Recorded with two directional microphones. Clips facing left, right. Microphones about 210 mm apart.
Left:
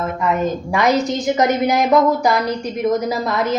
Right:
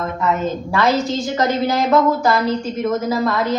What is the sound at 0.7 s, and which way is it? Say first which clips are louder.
A woman's voice: even; 15° left (ahead or behind).